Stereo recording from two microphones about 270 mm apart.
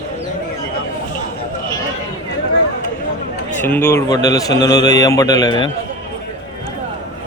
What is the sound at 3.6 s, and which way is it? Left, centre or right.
A man's voice, centre.